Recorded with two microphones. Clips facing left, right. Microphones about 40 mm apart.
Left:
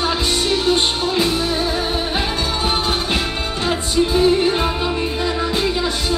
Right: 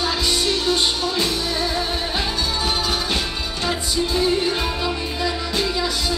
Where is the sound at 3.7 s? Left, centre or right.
Left.